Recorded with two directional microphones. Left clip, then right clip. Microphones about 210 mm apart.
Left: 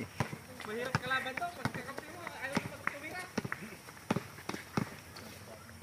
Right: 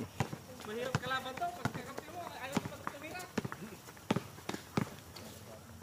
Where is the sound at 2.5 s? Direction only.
20° right (ahead or behind).